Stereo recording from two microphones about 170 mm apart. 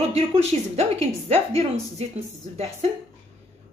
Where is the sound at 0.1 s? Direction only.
40° right (ahead or behind).